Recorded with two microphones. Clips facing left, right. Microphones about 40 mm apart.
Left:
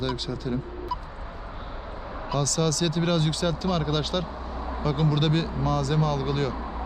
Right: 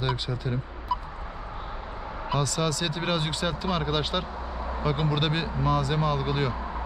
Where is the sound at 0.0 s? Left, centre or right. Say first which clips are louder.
Even; centre.